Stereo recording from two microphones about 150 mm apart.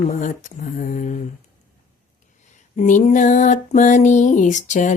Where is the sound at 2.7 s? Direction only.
55° left (ahead or behind).